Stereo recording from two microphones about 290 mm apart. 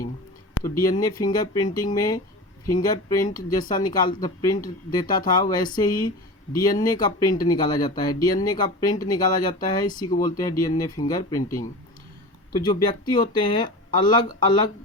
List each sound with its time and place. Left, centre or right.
0.8 s speech: centre
12.5 s speech: centre